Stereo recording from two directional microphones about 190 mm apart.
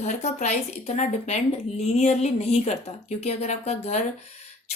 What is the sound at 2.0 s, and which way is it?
A woman's voice, 35° left (ahead or behind).